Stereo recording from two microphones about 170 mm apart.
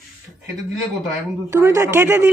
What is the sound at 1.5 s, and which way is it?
Speech, 15° right (ahead or behind).